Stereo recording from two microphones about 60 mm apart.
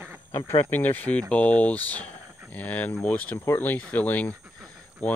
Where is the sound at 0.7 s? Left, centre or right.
Left.